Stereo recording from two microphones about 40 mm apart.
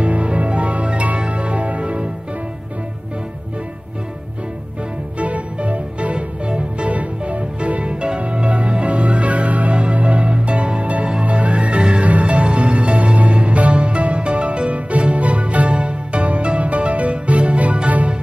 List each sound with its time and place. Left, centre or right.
0.0 s music: right
5.2 s music: right